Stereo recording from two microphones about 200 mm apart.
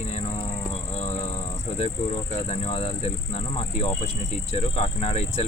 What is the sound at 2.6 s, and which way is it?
Speech, 30° left (ahead or behind).